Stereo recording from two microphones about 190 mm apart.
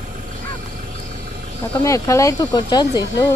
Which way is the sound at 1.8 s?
15° left (ahead or behind).